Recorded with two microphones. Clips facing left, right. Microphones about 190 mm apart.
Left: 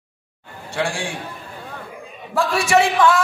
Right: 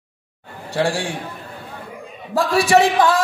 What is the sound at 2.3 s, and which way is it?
Speech, 35° right (ahead or behind).